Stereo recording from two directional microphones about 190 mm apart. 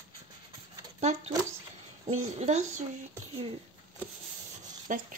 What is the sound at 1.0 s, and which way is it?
A woman's voice, 35° right (ahead or behind).